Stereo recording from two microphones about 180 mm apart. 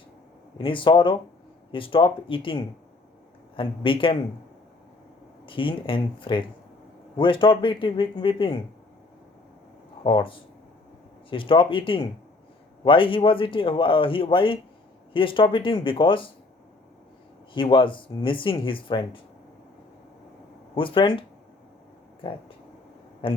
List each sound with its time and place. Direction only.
0.6 s speech: 25° left (ahead or behind)
5.5 s speech: 30° left (ahead or behind)
10.0 s speech: 25° left (ahead or behind)
17.5 s speech: 25° left (ahead or behind)
20.7 s a man's voice: 30° left (ahead or behind)